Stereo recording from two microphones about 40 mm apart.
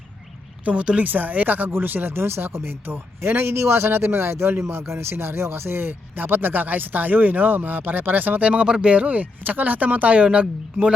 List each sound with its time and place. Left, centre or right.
0.6 s speech: right
1.0 s speech: right
3.2 s a man's voice: right
8.4 s a man's voice: right
10.4 s a man's voice: right